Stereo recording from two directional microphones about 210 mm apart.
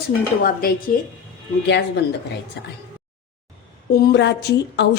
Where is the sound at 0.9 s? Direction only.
45° left (ahead or behind).